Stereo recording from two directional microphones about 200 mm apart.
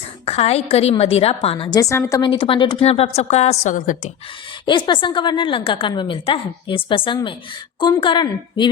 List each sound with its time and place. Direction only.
0.3 s a woman's voice: 30° left (ahead or behind)
4.6 s a woman's voice: 25° left (ahead or behind)